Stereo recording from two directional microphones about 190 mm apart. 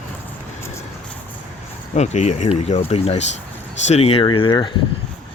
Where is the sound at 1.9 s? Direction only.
35° left (ahead or behind).